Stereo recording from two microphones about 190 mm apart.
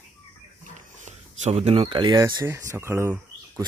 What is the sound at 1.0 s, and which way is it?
Speech, 35° right (ahead or behind).